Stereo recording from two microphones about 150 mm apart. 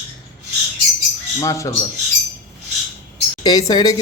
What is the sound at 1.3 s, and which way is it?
Speech, 20° left (ahead or behind).